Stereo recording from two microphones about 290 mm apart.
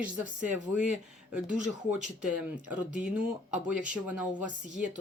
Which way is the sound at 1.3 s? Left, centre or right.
Centre.